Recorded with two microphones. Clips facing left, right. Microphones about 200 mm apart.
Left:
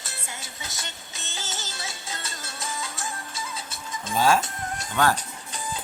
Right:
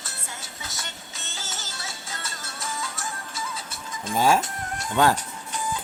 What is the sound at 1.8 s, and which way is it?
Music, 20° left (ahead or behind).